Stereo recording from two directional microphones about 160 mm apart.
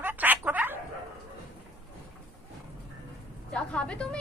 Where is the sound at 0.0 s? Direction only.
10° right (ahead or behind).